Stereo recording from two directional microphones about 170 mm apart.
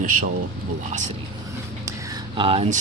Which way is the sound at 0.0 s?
50° right (ahead or behind).